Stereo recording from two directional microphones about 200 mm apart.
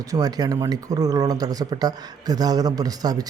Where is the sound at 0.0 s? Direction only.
20° right (ahead or behind).